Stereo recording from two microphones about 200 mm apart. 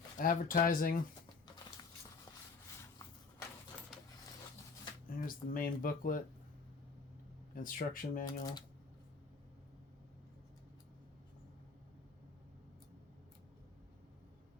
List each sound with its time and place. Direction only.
0.2 s speech: 45° left (ahead or behind)
5.0 s speech: 45° left (ahead or behind)
7.5 s speech: 45° left (ahead or behind)
8.3 s speech: 20° left (ahead or behind)